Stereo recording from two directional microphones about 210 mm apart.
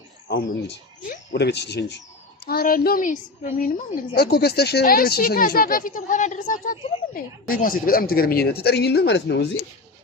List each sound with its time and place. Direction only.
1.0 s a woman's voice: 55° left (ahead or behind)